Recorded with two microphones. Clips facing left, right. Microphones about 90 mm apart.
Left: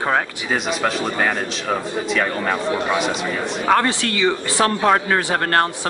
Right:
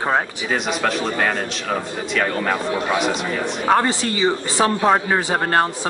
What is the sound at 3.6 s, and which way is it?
Speech, 15° right (ahead or behind).